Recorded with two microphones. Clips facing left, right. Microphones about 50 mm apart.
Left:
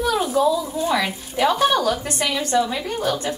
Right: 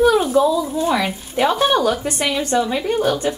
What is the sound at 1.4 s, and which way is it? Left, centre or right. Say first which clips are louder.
A woman's voice: right 2 dB; right.